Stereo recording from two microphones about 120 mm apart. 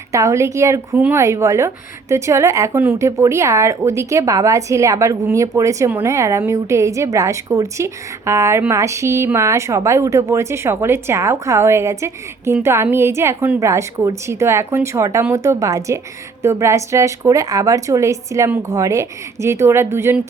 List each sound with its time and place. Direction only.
0.1 s a woman's voice: 25° right (ahead or behind)